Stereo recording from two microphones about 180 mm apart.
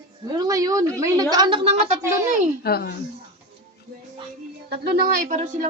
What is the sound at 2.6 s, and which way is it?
Speech, 60° left (ahead or behind).